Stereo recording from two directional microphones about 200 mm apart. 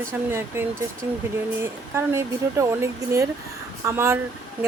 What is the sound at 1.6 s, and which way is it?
Speech, 15° right (ahead or behind).